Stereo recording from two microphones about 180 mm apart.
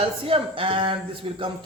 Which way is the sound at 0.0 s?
30° right (ahead or behind).